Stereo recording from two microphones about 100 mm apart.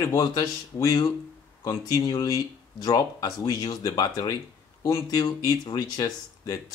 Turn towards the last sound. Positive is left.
turn(degrees=40)  # may be behind; listen again after turning